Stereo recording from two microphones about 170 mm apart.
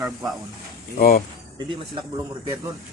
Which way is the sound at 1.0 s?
60° left (ahead or behind).